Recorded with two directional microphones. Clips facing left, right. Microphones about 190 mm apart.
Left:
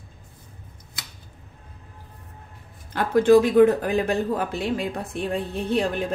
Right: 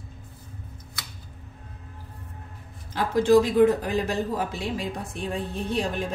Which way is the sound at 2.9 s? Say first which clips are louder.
Left 3 dB; 55° left (ahead or behind).